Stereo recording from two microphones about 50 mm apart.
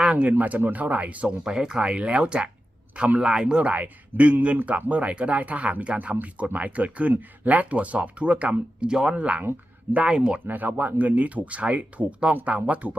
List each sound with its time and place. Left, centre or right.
0.0 s speech: right
1.5 s speech: centre
10.4 s speech: right